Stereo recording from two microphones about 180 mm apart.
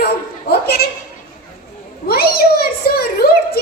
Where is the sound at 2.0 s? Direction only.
60° left (ahead or behind).